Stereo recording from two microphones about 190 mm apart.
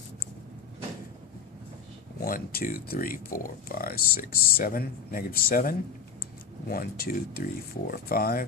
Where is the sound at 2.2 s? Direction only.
50° left (ahead or behind).